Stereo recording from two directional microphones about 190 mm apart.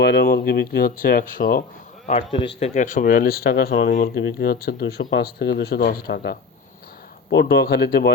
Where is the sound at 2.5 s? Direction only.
40° left (ahead or behind).